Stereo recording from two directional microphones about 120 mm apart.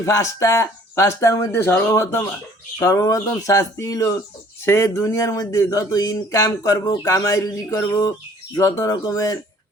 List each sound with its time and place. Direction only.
0.0 s speech: 25° left (ahead or behind)